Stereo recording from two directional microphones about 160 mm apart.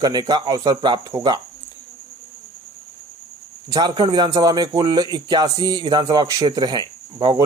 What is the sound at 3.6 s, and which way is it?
A man's voice, 25° right (ahead or behind).